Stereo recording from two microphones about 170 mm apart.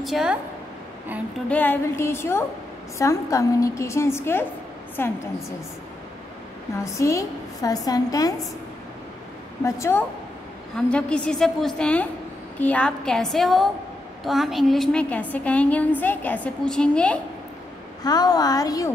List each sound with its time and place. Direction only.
0.0 s a woman's voice: centre (ahead or behind)
1.5 s a woman's voice: 10° left (ahead or behind)
6.8 s a woman's voice: 20° left (ahead or behind)
9.7 s a woman's voice: 15° left (ahead or behind)
18.0 s a woman's voice: 25° left (ahead or behind)